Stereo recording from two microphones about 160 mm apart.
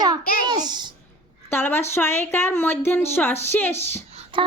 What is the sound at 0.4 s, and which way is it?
Speech, 25° right (ahead or behind).